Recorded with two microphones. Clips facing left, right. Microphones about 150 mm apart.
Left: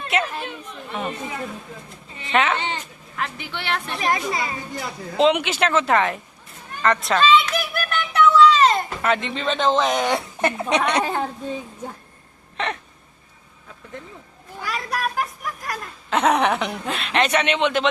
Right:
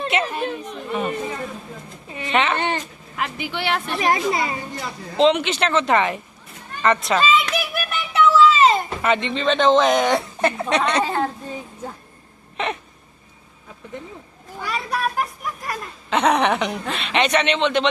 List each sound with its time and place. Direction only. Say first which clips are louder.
0.1 s speech: left 2 dB; centre (ahead or behind)
4.0 s a woman's voice: right 3 dB; 30° right (ahead or behind)
4.9 s speech: right 1 dB; 5° left (ahead or behind)
6.8 s a sound: even; 5° right (ahead or behind)
10.4 s speech: left 1 dB; 15° left (ahead or behind)
12.6 s speech: right 1 dB; 5° right (ahead or behind)
14.6 s speech: right 2 dB; centre (ahead or behind)